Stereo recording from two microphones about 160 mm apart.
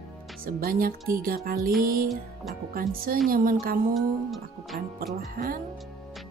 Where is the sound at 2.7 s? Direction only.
65° right (ahead or behind).